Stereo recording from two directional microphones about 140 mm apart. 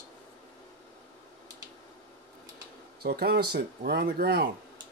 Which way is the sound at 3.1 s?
90° right.